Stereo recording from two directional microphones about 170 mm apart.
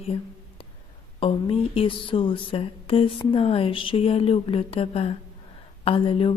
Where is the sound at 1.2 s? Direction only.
30° left (ahead or behind).